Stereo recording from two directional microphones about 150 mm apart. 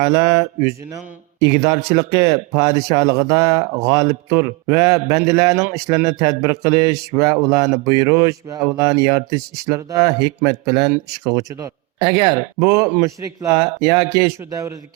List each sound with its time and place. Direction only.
0.0 s speech: 20° right (ahead or behind)